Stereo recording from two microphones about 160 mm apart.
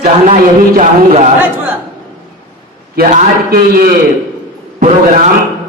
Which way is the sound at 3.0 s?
70° right (ahead or behind).